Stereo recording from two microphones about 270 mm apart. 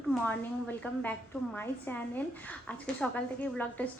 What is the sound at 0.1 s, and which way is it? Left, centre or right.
A woman's voice, centre.